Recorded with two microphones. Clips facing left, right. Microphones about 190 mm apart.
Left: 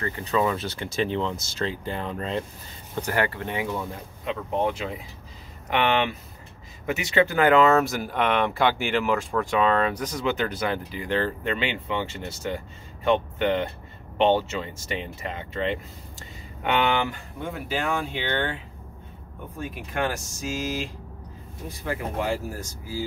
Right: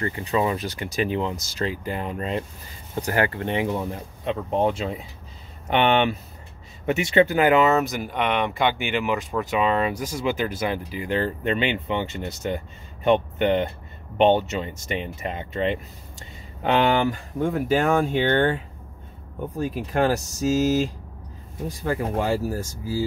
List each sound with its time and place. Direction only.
0.1 s speech: 15° right (ahead or behind)
3.0 s speech: 25° right (ahead or behind); by 8.3 s centre (ahead or behind)
8.3 s speech: 10° right (ahead or behind)
16.6 s speech: 35° right (ahead or behind)